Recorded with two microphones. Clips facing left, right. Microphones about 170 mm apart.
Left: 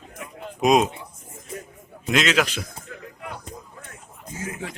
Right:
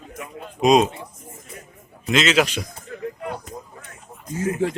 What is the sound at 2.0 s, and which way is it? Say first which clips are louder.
Speech: right 2 dB; centre (ahead or behind).